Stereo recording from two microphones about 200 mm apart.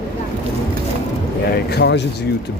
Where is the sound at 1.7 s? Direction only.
60° left (ahead or behind).